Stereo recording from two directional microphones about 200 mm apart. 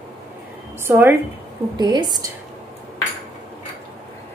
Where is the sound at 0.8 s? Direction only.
10° right (ahead or behind).